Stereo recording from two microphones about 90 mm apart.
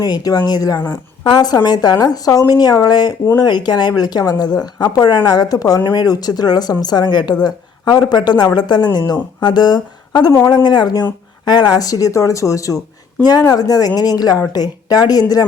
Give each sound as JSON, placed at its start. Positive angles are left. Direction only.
{"t": 0.0, "sound": "a woman's voice", "side_deg": 45}